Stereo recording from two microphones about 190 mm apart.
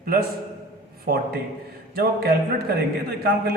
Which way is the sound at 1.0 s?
55° right (ahead or behind).